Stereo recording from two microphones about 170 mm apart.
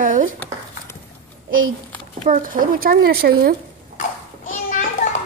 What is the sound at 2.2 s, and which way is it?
Speech, 55° right (ahead or behind).